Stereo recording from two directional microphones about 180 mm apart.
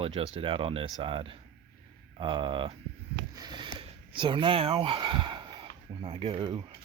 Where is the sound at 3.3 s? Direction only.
25° right (ahead or behind).